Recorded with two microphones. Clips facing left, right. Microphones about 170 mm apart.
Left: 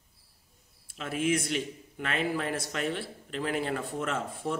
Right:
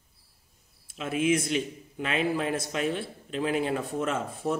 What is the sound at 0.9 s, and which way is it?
A man's voice, 10° right (ahead or behind).